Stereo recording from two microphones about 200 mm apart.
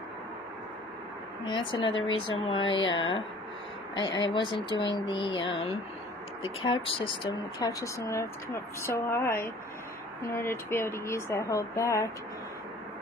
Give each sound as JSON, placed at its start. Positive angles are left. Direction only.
{"t": 1.5, "sound": "speech", "side_deg": 25}